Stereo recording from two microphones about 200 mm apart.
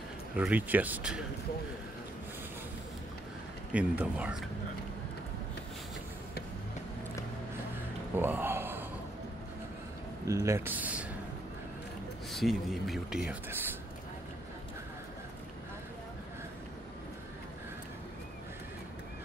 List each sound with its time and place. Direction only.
0.4 s speech: 5° right (ahead or behind)
3.7 s speech: 5° right (ahead or behind)
8.2 s a sound: 10° right (ahead or behind)
10.2 s speech: 15° right (ahead or behind)
12.3 s speech: centre (ahead or behind)